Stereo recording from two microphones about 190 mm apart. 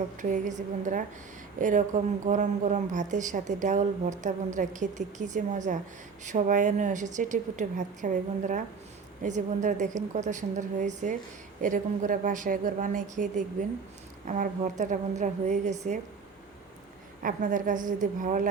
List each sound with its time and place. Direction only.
0.2 s a woman's voice: 40° right (ahead or behind)
17.2 s speech: 45° right (ahead or behind)